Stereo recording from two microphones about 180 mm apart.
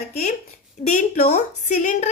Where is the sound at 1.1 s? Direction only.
60° left (ahead or behind).